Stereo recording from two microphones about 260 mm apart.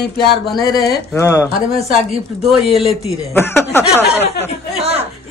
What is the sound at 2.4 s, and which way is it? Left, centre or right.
A man's voice, centre.